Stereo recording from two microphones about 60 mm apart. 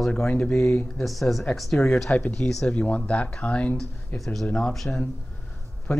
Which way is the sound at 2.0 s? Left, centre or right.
Left.